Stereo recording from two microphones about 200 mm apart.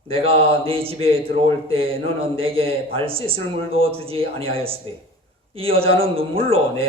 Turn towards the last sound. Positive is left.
turn(degrees=-30)  # may be behind; listen again after turning